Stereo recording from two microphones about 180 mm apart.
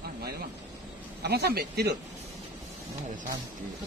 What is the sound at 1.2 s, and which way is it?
Speech, 65° right (ahead or behind).